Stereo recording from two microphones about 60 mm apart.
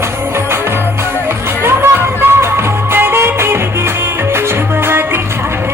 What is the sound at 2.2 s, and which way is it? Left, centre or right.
Music, right.